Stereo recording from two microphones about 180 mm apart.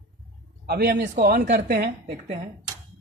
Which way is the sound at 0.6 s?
60° right (ahead or behind).